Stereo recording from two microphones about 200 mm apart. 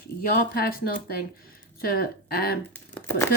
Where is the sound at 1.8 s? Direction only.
45° left (ahead or behind).